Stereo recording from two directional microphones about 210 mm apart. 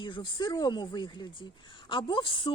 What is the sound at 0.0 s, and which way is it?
A woman's voice, 20° left (ahead or behind).